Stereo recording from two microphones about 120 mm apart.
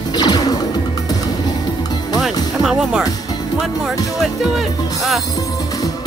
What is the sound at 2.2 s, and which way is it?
Music, 5° right (ahead or behind).